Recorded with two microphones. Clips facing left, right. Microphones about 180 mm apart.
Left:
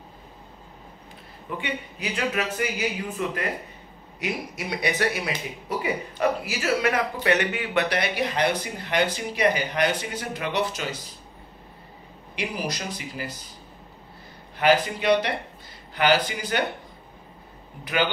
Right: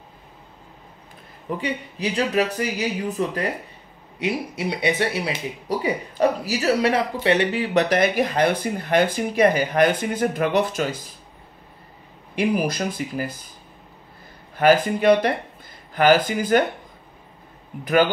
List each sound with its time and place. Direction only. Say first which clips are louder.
1.6 s speech: right 5 dB; 35° right (ahead or behind)
12.4 s speech: right 8 dB; 50° right (ahead or behind)
14.6 s speech: right 4 dB; 50° right (ahead or behind)